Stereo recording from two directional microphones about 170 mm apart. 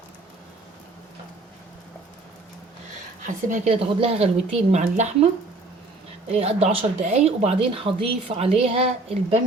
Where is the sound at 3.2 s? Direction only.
45° right (ahead or behind).